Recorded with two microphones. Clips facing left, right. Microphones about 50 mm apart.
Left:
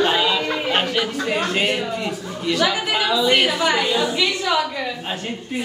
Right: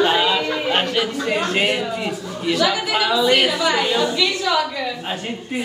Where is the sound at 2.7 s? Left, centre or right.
Centre.